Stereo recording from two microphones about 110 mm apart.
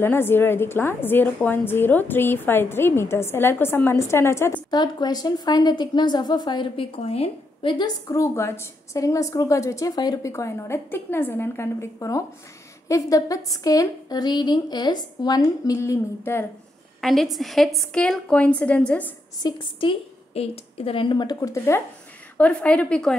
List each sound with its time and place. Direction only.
0.0 s a woman's voice: 20° left (ahead or behind)
4.6 s a woman's voice: 40° left (ahead or behind); by 7.2 s 65° left (ahead or behind)
7.6 s a woman's voice: 45° left (ahead or behind)
8.1 s a woman's voice: 25° left (ahead or behind)
10.3 s a woman's voice: 25° left (ahead or behind)
17.0 s a woman's voice: centre (ahead or behind)
19.4 s a woman's voice: 50° left (ahead or behind); by 21.8 s 25° left (ahead or behind)
22.4 s a woman's voice: 10° left (ahead or behind)